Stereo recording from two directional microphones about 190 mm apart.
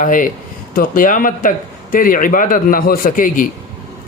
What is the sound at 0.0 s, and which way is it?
Speech, 45° left (ahead or behind).